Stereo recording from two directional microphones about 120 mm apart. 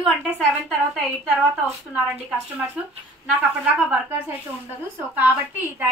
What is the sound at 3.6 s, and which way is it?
Speech, 10° right (ahead or behind).